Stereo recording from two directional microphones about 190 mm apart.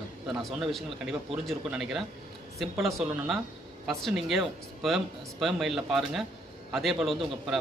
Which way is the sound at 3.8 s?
Centre (ahead or behind).